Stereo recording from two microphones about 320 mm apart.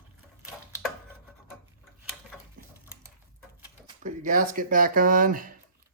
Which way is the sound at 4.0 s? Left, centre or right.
Right.